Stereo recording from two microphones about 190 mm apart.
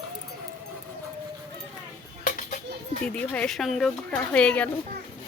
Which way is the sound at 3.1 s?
5° left (ahead or behind).